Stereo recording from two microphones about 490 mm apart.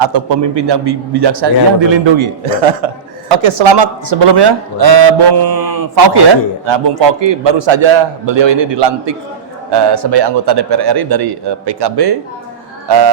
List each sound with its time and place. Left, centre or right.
0.0 s a man's voice: right
3.2 s a man's voice: right
4.1 s a man's voice: right
6.7 s a man's voice: right